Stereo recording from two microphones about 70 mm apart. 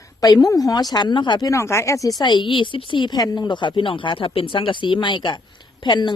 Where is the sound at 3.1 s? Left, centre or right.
Left.